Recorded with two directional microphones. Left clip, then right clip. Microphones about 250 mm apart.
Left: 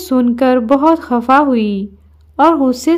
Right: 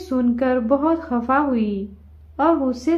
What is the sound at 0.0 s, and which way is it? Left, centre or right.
A woman's voice, left.